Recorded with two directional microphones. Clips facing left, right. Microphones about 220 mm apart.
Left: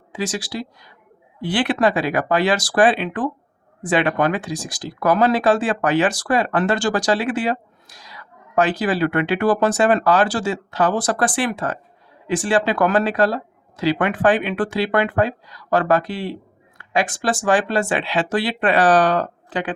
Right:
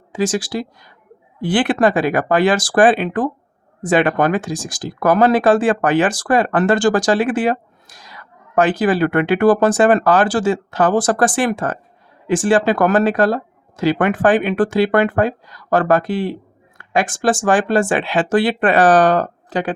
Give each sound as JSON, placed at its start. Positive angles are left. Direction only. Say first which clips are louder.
{"t": 0.1, "sound": "speech", "louder": "right 6 dB", "side_deg": -50}